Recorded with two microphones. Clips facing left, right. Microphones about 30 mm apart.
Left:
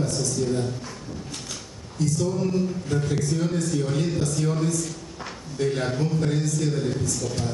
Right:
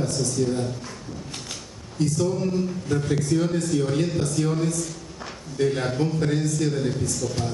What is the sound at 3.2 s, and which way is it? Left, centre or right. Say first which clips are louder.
A man's voice: right 2 dB; centre.